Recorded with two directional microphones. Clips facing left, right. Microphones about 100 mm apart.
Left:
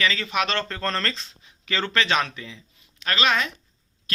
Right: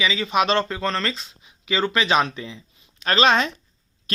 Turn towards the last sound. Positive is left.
turn(degrees=-30)  # may be behind; listen again after turning